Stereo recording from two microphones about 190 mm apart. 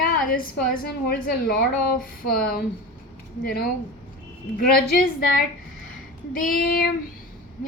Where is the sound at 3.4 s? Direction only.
55° left (ahead or behind).